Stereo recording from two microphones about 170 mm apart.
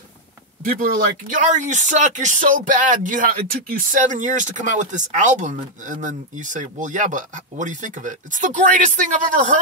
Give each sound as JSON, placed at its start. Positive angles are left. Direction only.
{"t": 1.3, "sound": "speech", "side_deg": -45}